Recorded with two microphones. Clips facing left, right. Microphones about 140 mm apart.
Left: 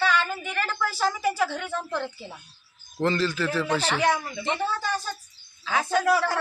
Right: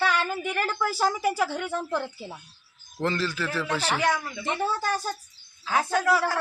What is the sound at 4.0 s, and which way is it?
Speech, 25° left (ahead or behind).